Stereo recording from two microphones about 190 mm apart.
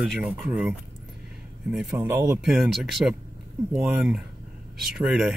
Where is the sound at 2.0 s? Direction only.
15° right (ahead or behind).